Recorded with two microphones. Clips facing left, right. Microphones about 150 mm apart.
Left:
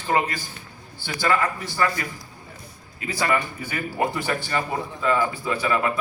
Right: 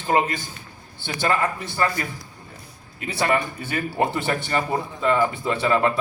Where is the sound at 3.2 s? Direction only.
25° right (ahead or behind).